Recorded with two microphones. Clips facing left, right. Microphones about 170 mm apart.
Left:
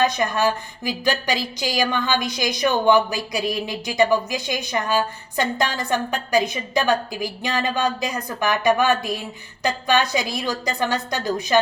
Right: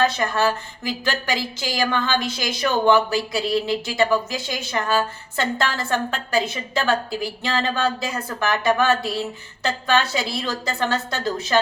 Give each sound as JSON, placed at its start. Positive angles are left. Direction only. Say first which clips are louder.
{"t": 0.0, "sound": "a woman's voice", "louder": "even", "side_deg": 15}